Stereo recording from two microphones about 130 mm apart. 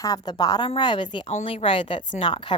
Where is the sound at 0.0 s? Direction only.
30° left (ahead or behind).